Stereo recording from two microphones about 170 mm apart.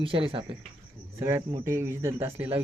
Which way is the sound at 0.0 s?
30° right (ahead or behind).